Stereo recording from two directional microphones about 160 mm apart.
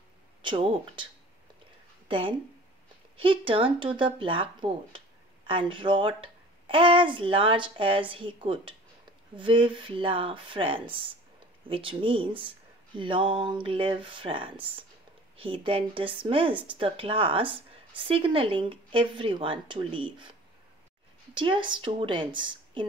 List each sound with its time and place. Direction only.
0.4 s speech: 30° right (ahead or behind)
2.0 s speech: 35° right (ahead or behind)
21.4 s speech: 30° right (ahead or behind)